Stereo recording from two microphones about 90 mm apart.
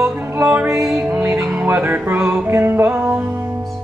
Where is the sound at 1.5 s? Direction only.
20° right (ahead or behind).